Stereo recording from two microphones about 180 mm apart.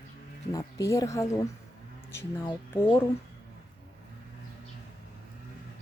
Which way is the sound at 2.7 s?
10° left (ahead or behind).